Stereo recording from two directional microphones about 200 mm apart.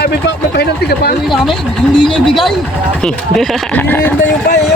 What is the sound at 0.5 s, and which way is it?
Speech, 55° left (ahead or behind).